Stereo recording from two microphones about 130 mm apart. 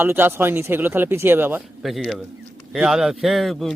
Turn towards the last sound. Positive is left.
turn(degrees=0)  # may be behind; listen again after turning